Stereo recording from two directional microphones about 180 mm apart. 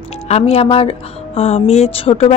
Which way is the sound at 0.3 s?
35° left (ahead or behind).